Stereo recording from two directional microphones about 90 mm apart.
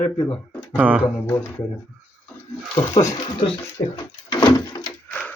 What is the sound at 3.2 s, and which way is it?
Speech, 65° left (ahead or behind).